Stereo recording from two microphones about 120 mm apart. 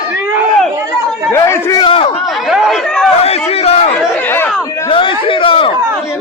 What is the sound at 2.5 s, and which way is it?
Chatter, centre (ahead or behind).